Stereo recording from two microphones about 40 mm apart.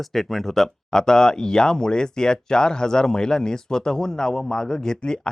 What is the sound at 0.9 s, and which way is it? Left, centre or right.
Speech, centre.